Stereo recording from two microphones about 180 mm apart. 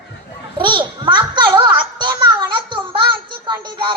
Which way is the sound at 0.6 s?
25° right (ahead or behind).